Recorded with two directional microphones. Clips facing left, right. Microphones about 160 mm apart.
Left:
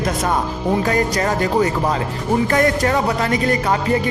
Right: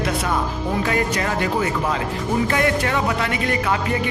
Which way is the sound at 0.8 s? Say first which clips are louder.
Left 3 dB; 40° left (ahead or behind).